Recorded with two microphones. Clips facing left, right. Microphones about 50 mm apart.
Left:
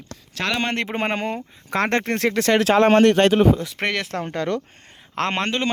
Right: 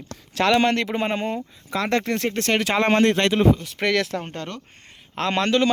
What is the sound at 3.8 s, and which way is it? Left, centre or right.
Speech, left.